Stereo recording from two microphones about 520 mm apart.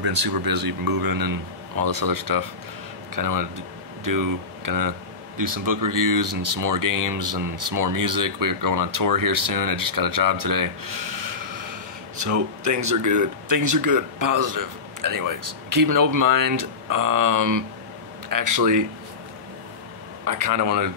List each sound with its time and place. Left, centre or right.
0.0 s speech: right
20.2 s speech: right